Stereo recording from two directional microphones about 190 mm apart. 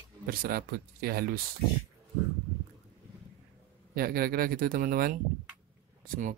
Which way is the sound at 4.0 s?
50° right (ahead or behind).